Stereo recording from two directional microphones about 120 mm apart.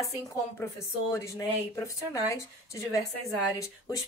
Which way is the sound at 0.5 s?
25° left (ahead or behind).